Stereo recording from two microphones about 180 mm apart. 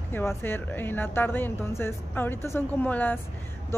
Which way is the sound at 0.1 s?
15° left (ahead or behind).